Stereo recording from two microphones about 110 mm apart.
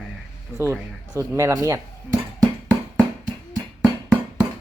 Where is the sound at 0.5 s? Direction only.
15° right (ahead or behind).